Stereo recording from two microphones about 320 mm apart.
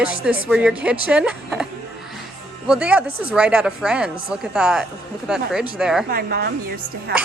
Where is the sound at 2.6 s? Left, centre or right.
Centre.